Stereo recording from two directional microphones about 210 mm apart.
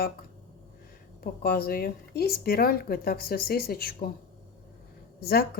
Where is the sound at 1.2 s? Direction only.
45° left (ahead or behind).